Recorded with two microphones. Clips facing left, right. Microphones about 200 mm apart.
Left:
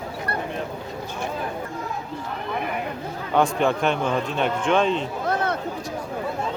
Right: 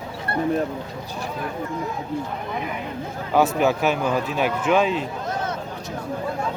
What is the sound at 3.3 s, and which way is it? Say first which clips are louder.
A man's voice: right 2 dB; 5° right (ahead or behind).